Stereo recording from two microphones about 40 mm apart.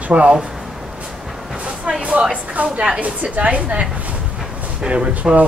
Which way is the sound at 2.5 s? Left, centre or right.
Right.